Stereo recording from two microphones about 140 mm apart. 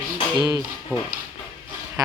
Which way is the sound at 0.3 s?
30° right (ahead or behind).